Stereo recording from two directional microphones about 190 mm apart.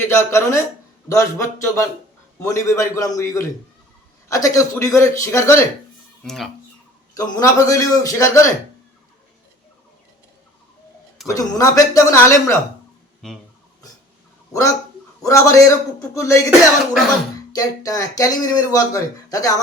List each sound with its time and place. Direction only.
0.2 s speech: 15° left (ahead or behind)
6.2 s speech: centre (ahead or behind)
7.1 s speech: 20° left (ahead or behind)
11.3 s speech: 15° left (ahead or behind)
13.2 s speech: centre (ahead or behind)
15.2 s speech: 15° left (ahead or behind)
16.5 s speech: centre (ahead or behind)
17.5 s speech: 20° left (ahead or behind)